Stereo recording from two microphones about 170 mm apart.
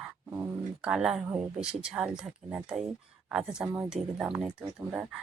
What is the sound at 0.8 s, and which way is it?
Speech, 5° right (ahead or behind).